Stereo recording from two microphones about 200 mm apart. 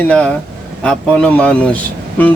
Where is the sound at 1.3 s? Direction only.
5° left (ahead or behind).